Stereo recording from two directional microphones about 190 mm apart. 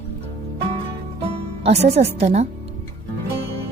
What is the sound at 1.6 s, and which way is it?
Speech, 35° right (ahead or behind).